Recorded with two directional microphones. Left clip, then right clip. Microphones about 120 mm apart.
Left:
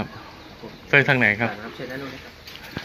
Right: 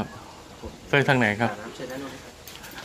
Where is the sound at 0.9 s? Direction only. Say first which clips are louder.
Left 4 dB; 30° right (ahead or behind).